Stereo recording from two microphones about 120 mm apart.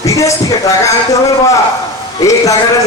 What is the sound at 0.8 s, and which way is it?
Speech, 25° left (ahead or behind).